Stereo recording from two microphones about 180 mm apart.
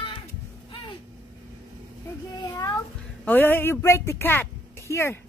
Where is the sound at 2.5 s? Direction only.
20° left (ahead or behind).